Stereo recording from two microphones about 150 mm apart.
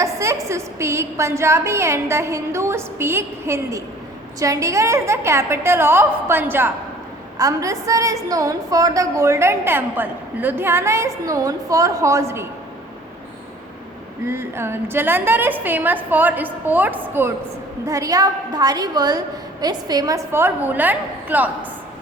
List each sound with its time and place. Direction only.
0.0 s a sound: 20° right (ahead or behind)
0.4 s a woman's voice: 20° right (ahead or behind)
14.3 s a woman's voice: 15° right (ahead or behind)